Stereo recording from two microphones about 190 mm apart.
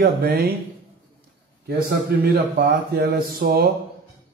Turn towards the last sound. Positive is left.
turn(degrees=-50)  # may be behind; listen again after turning